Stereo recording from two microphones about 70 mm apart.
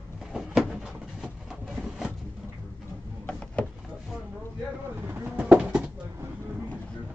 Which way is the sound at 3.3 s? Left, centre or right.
Centre.